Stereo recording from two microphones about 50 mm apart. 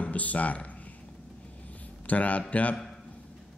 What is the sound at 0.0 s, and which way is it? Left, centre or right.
Speech, left.